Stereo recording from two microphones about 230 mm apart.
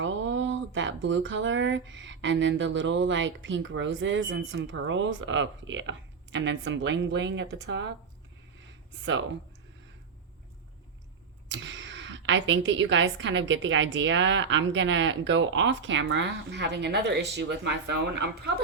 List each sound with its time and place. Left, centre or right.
0.0 s speech: right
11.5 s speech: right